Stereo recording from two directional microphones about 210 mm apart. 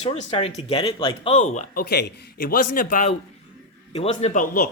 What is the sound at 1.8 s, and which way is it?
Speech, 50° left (ahead or behind).